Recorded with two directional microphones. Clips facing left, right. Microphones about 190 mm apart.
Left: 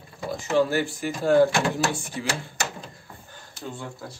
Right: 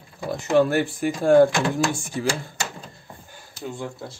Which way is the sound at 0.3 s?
55° right (ahead or behind).